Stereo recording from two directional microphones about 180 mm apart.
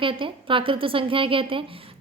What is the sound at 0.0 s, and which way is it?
A woman's voice, 30° right (ahead or behind).